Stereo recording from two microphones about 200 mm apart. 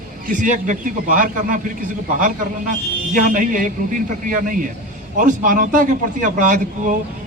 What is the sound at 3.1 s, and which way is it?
A man's voice, 40° right (ahead or behind).